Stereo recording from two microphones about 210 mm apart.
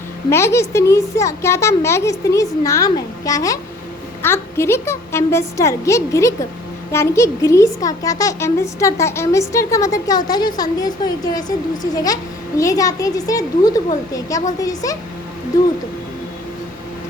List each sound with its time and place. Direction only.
0.3 s a woman's voice: 15° left (ahead or behind)